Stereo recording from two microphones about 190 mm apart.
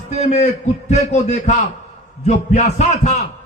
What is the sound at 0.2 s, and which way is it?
A man's voice, 40° left (ahead or behind).